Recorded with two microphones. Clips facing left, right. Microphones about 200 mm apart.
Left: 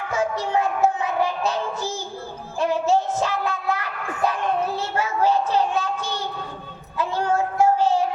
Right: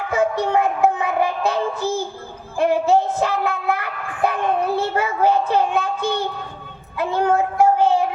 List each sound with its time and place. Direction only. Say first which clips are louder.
0.1 s child singing: right 4 dB; 60° right (ahead or behind)
4.2 s speech: right 3 dB; 60° right (ahead or behind)
6.9 s child singing: right 4 dB; 60° right (ahead or behind)